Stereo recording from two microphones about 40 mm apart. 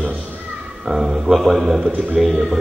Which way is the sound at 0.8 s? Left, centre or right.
Centre.